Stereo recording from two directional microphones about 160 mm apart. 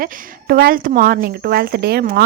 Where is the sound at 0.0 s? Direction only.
65° right (ahead or behind).